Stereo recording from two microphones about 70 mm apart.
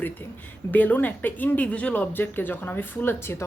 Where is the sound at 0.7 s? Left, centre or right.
Left.